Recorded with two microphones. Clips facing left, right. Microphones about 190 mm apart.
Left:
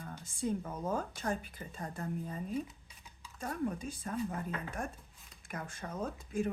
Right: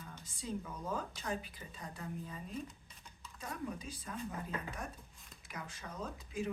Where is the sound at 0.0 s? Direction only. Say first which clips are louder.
Left 9 dB; 50° left (ahead or behind).